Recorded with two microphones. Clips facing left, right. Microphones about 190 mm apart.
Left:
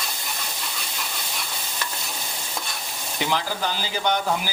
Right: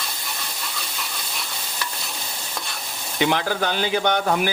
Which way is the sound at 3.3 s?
65° right (ahead or behind).